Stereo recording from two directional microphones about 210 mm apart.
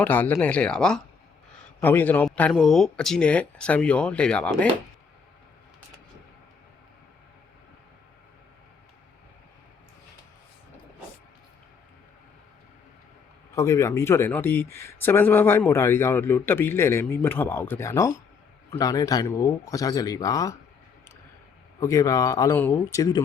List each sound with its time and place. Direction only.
0.0 s speech: 10° left (ahead or behind)
13.6 s speech: 15° left (ahead or behind)
21.8 s speech: 15° left (ahead or behind)